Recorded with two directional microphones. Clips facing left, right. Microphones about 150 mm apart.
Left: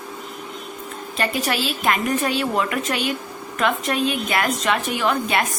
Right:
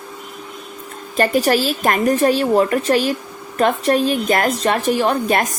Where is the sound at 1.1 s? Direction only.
45° right (ahead or behind).